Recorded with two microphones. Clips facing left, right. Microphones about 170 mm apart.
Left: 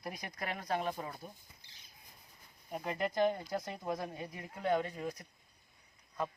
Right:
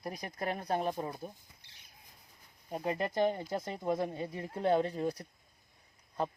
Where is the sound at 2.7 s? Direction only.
25° right (ahead or behind).